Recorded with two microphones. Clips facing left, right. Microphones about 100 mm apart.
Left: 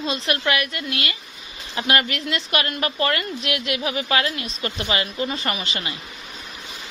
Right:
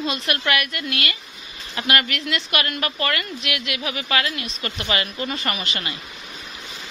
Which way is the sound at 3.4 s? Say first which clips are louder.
Left 3 dB; 35° left (ahead or behind).